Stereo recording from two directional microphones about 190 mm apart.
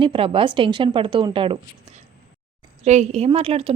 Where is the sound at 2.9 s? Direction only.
35° right (ahead or behind).